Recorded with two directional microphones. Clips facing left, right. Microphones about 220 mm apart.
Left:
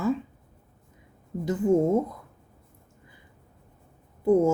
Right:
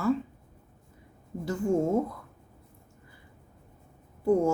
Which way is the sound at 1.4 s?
20° left (ahead or behind).